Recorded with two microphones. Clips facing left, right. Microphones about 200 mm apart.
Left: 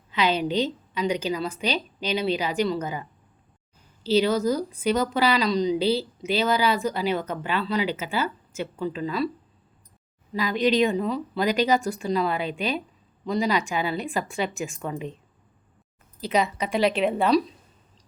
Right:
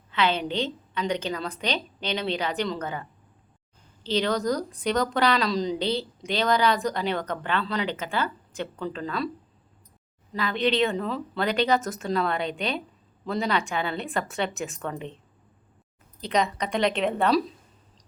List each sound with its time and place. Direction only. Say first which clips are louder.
0.1 s a woman's voice: left 2 dB; 10° left (ahead or behind)
10.3 s a woman's voice: left 3 dB; 10° left (ahead or behind)
10.9 s a woman's voice: left 3 dB; centre (ahead or behind)
16.2 s a woman's voice: left 1 dB; 5° left (ahead or behind)